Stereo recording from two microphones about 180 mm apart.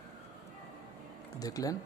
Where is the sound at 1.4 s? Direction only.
20° left (ahead or behind).